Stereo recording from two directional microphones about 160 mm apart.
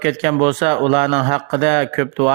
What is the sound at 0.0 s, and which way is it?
A man's voice, 40° right (ahead or behind).